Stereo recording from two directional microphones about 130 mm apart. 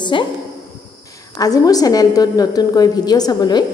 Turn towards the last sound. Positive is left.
turn(degrees=30)  # may be behind; listen again after turning